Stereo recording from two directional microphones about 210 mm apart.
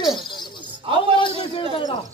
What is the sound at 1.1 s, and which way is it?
Speech, 25° left (ahead or behind).